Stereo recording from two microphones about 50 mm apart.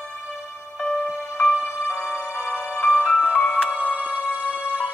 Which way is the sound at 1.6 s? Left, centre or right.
Left.